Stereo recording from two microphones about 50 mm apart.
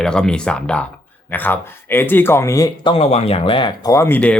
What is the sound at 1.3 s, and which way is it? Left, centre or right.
Speech, left.